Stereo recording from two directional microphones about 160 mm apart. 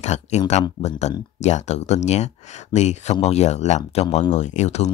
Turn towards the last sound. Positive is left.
turn(degrees=45)  # may be behind; listen again after turning